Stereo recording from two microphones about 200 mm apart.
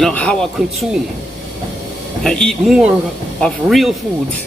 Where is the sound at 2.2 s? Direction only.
5° left (ahead or behind).